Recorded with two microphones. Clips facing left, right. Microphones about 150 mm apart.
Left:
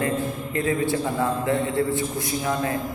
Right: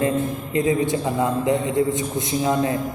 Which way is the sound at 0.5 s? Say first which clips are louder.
Right 3 dB; 20° right (ahead or behind).